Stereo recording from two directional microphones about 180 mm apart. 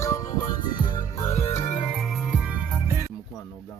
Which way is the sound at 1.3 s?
40° left (ahead or behind).